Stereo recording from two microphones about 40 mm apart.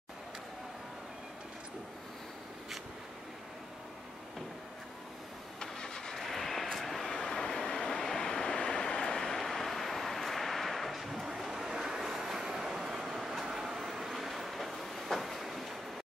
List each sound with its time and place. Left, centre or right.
5.6 s vehicle: centre
6.1 s vehicle: centre